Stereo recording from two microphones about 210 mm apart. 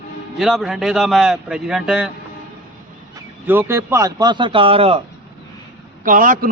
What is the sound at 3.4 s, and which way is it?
Speech, 10° right (ahead or behind).